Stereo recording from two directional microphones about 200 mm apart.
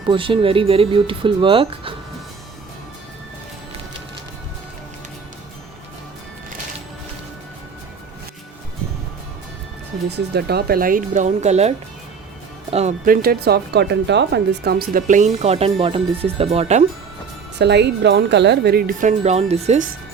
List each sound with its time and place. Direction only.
0.1 s speech: 25° right (ahead or behind)
10.1 s speech: 55° right (ahead or behind); by 11.7 s 35° right (ahead or behind)
12.7 s speech: 35° right (ahead or behind)
13.2 s speech: 55° right (ahead or behind); by 16.8 s 30° right (ahead or behind)
17.6 s speech: 60° right (ahead or behind); by 19.9 s 35° right (ahead or behind)